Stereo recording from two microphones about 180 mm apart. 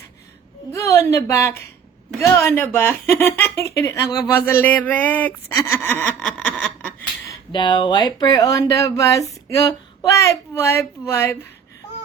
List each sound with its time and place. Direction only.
0.7 s speech: 15° left (ahead or behind)
5.6 s a sound: 10° left (ahead or behind)
7.5 s speech: 25° left (ahead or behind)